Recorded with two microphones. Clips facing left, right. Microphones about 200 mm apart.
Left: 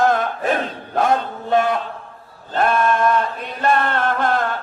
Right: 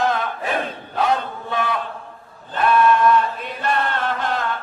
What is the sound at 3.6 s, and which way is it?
Chant, 50° left (ahead or behind).